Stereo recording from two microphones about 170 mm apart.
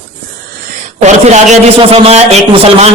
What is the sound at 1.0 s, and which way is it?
A man's voice, 40° right (ahead or behind).